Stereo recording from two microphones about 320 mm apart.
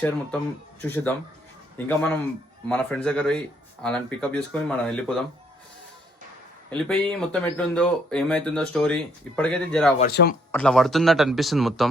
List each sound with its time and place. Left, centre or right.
0.8 s speech: centre
6.7 s speech: centre
10.0 s speech: left
10.5 s speech: centre